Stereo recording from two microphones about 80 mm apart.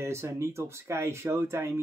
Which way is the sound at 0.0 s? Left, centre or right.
Right.